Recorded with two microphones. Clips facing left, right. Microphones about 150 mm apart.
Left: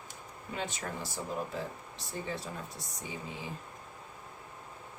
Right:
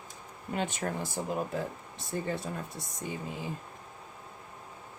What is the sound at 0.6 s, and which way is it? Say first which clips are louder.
Speech: right 5 dB; 55° right (ahead or behind).